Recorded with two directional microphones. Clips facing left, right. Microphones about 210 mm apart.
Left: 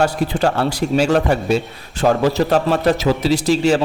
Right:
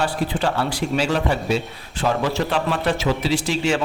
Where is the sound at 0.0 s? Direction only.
40° left (ahead or behind).